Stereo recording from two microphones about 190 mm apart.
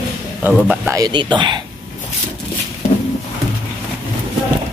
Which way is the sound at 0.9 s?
20° right (ahead or behind).